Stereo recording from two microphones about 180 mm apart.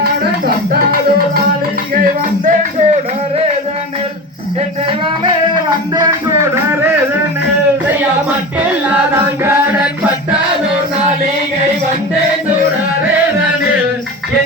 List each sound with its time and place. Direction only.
0.0 s music: 55° right (ahead or behind)
2.4 s music: 40° right (ahead or behind)
4.9 s music: 25° right (ahead or behind)
6.4 s music: 15° right (ahead or behind)
9.4 s chant: 10° right (ahead or behind)